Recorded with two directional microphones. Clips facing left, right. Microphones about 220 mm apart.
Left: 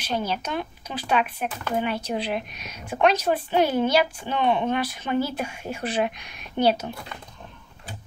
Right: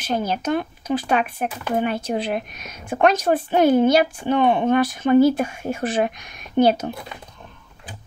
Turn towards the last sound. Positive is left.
turn(degrees=-45)  # may be behind; listen again after turning